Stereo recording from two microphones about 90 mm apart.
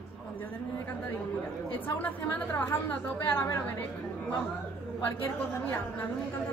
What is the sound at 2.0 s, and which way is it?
A woman's voice, 20° left (ahead or behind).